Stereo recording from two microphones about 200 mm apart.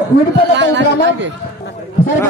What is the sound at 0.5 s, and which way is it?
Speech, 65° right (ahead or behind).